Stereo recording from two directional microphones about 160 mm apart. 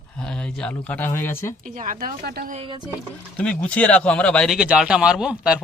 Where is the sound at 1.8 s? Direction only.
60° right (ahead or behind).